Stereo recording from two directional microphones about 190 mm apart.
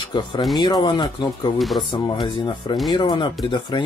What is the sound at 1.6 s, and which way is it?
Speech, centre (ahead or behind).